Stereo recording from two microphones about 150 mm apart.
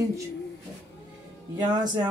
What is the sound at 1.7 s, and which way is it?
Speech, 30° right (ahead or behind).